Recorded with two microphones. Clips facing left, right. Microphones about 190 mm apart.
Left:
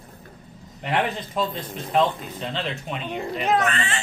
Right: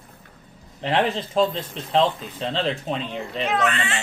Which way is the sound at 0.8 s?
30° right (ahead or behind).